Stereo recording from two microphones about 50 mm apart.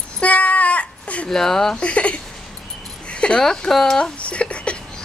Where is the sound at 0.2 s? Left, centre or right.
Left.